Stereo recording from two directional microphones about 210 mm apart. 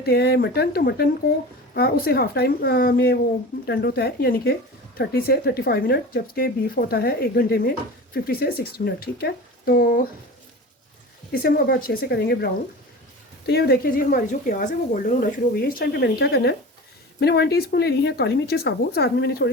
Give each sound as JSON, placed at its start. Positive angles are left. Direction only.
{"t": 0.0, "sound": "a woman's voice", "side_deg": 50}
{"t": 11.3, "sound": "a woman's voice", "side_deg": 45}
{"t": 13.5, "sound": "a woman's voice", "side_deg": 50}